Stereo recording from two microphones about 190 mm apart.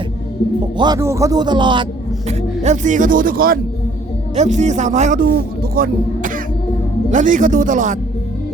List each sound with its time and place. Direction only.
0.8 s speech: 20° right (ahead or behind); by 3.6 s 50° right (ahead or behind)
4.4 s a man's voice: 40° right (ahead or behind)